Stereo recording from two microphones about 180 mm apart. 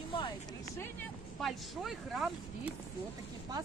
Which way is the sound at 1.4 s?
Centre (ahead or behind).